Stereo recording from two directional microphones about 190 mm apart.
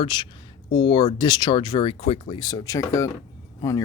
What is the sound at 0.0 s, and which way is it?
Speech, 25° left (ahead or behind).